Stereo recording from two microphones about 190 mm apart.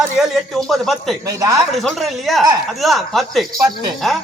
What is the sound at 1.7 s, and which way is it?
Speech, centre (ahead or behind).